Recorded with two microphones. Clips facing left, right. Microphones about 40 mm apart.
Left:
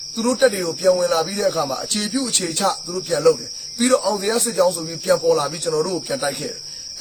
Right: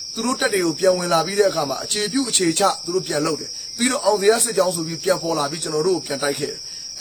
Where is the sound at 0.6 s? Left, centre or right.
Right.